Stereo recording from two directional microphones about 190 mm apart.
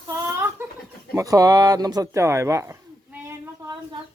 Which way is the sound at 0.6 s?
10° right (ahead or behind).